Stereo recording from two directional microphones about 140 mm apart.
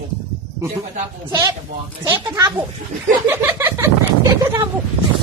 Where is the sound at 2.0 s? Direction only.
25° right (ahead or behind).